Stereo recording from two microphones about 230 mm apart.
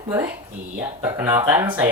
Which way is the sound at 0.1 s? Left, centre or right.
Centre.